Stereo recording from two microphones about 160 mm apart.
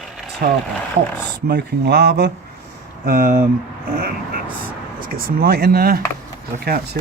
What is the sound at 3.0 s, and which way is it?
Speech, 60° right (ahead or behind).